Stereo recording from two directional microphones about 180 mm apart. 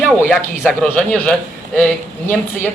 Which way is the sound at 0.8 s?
5° left (ahead or behind).